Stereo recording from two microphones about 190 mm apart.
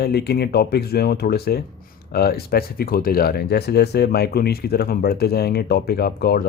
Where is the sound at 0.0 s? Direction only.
60° left (ahead or behind).